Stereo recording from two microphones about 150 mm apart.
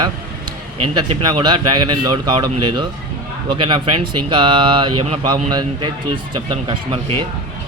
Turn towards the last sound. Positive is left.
turn(degrees=-35)  # may be behind; listen again after turning